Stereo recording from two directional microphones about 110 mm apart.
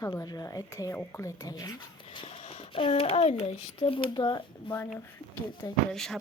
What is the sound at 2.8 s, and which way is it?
A child's voice, 55° left (ahead or behind).